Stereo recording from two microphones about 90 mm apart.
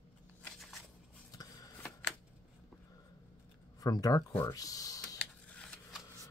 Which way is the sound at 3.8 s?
45° left (ahead or behind).